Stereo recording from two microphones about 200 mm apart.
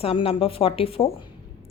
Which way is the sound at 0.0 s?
30° left (ahead or behind).